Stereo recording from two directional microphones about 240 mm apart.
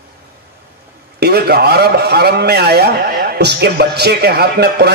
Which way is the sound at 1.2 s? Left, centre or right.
Right.